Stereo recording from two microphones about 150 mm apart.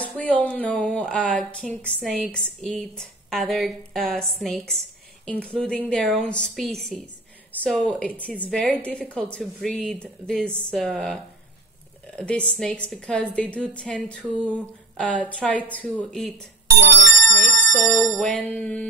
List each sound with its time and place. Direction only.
0.0 s a woman's voice: 10° left (ahead or behind)
12.2 s a woman's voice: 5° left (ahead or behind)
17.3 s speech: 55° right (ahead or behind)
18.1 s a woman's voice: 10° left (ahead or behind)